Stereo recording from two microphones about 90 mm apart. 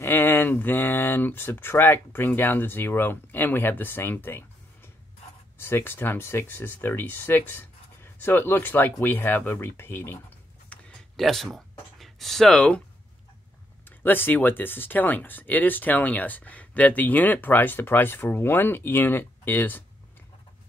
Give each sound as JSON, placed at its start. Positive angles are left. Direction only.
{"t": 0.0, "sound": "speech", "side_deg": 25}
{"t": 5.6, "sound": "speech", "side_deg": 25}
{"t": 11.1, "sound": "speech", "side_deg": 5}
{"t": 13.8, "sound": "speech", "side_deg": 20}